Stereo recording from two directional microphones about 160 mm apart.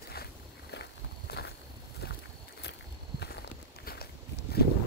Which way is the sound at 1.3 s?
90° left.